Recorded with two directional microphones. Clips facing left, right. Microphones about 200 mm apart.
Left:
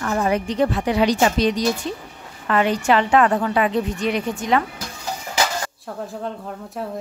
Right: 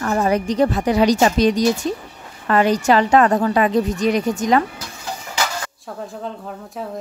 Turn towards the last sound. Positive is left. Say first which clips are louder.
# even
turn(degrees=0)  # may be behind; listen again after turning